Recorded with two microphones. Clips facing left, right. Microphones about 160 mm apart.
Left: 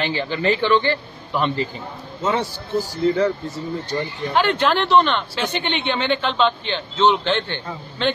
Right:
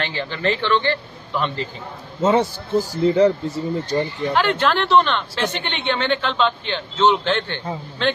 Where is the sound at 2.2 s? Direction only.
25° right (ahead or behind).